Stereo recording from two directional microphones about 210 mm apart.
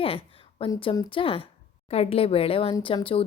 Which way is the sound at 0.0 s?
25° left (ahead or behind).